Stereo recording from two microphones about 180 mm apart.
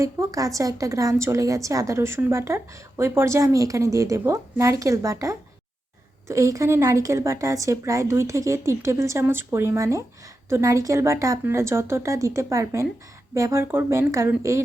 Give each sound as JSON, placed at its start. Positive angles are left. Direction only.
{"t": 0.0, "sound": "a woman's voice", "side_deg": -20}